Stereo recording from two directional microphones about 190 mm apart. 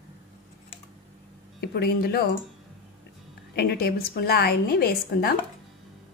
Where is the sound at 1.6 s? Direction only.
60° left (ahead or behind).